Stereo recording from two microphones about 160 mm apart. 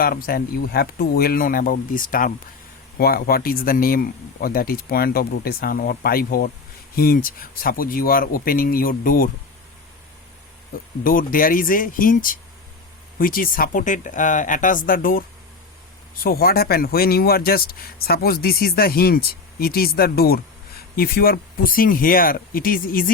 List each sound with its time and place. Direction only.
0.0 s speech: 65° left (ahead or behind)
3.0 s speech: 70° left (ahead or behind)
11.0 s speech: 60° left (ahead or behind)
16.2 s speech: 70° left (ahead or behind)